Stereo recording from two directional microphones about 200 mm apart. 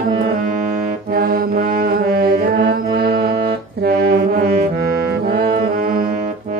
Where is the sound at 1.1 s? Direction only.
50° right (ahead or behind).